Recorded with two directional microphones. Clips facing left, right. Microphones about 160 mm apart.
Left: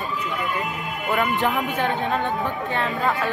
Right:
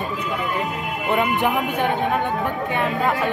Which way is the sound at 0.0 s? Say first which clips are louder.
Right 2 dB; 20° right (ahead or behind).